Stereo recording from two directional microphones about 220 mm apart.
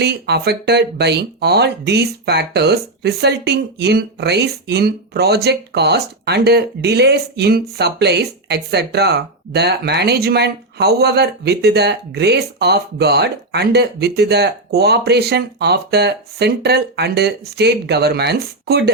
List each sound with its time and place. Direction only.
0.0 s speech: 50° right (ahead or behind)